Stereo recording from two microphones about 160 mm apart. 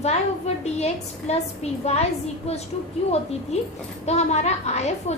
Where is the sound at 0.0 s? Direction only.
40° left (ahead or behind).